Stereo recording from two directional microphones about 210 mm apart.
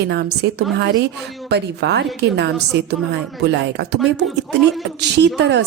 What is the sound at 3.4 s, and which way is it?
Speech, 50° right (ahead or behind).